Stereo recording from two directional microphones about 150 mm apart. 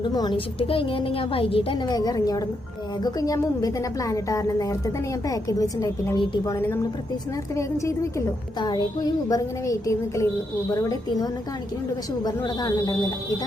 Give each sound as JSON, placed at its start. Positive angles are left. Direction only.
{"t": 0.0, "sound": "a woman's voice", "side_deg": 30}
{"t": 1.9, "sound": "a woman's voice", "side_deg": 25}